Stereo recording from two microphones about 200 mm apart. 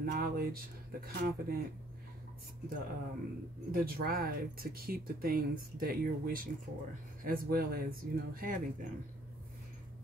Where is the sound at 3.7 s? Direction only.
50° right (ahead or behind).